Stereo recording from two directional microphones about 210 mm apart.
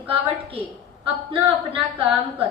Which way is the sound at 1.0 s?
25° right (ahead or behind).